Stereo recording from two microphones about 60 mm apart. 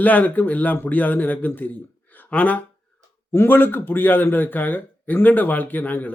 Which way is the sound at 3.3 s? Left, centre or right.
Left.